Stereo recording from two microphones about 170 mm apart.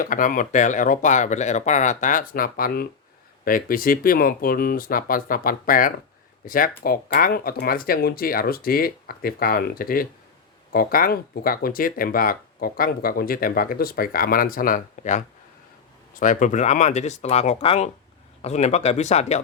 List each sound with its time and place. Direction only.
0.0 s speech: 50° left (ahead or behind)
16.2 s speech: 50° left (ahead or behind)